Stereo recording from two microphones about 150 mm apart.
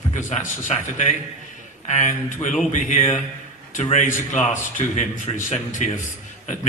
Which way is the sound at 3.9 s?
50° left (ahead or behind).